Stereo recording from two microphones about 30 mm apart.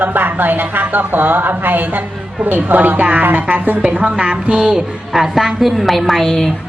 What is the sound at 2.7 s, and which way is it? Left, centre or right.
Speech, right.